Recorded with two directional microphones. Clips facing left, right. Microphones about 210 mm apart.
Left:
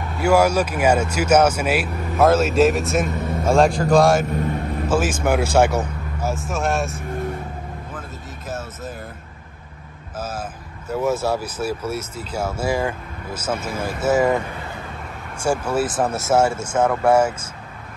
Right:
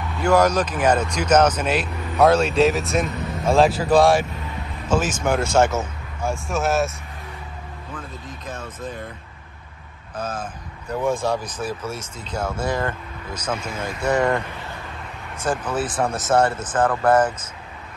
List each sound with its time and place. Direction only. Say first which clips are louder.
0.2 s speech: left 1 dB; 10° left (ahead or behind)
3.2 s vehicle: left 4 dB; 50° left (ahead or behind)
3.4 s a man's voice: even; centre (ahead or behind)
4.3 s vehicle: left 9 dB; 50° left (ahead or behind)
5.2 s speech: left 2 dB; 10° left (ahead or behind)
6.2 s a man's voice: even; centre (ahead or behind)
7.1 s vehicle: left 13 dB; 50° left (ahead or behind)
8.5 s a sound: left 2 dB; 5° left (ahead or behind)
10.1 s a man's voice: even; 5° left (ahead or behind)
15.4 s speech: left 3 dB; 10° left (ahead or behind)